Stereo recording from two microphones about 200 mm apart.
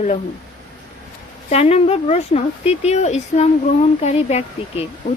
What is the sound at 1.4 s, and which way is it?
Speech, 30° left (ahead or behind).